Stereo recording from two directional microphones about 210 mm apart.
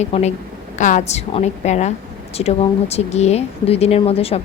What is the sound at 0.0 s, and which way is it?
A woman's voice, 30° left (ahead or behind).